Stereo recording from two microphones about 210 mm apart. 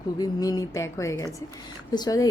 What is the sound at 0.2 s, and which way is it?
A woman's voice, 15° left (ahead or behind).